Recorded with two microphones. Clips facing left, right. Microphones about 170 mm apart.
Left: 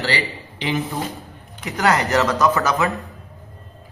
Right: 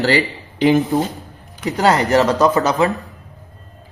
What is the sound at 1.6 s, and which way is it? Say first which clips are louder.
Speech: right 4 dB; 30° right (ahead or behind).